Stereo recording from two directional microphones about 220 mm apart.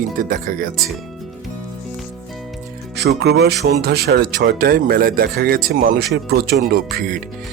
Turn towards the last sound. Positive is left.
turn(degrees=-45)  # may be behind; listen again after turning